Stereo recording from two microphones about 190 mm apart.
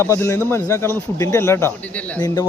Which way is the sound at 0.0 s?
15° left (ahead or behind).